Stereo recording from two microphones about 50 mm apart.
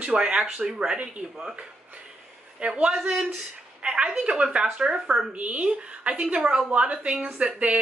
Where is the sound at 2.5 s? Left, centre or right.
Right.